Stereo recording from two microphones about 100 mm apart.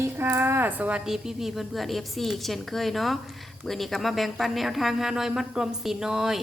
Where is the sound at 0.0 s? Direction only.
20° right (ahead or behind).